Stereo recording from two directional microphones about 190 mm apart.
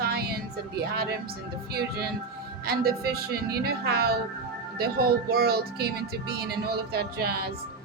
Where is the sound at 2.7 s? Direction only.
55° right (ahead or behind).